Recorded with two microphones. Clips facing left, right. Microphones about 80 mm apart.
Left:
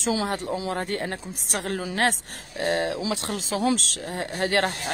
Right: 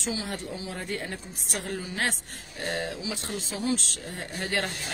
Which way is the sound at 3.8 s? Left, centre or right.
Left.